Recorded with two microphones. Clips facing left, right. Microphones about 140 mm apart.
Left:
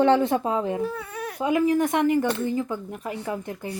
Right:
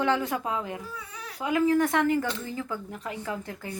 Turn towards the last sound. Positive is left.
turn(degrees=20)  # may be behind; listen again after turning